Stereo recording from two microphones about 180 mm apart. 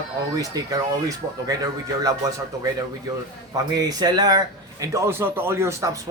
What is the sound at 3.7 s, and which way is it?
A man's voice, 20° right (ahead or behind).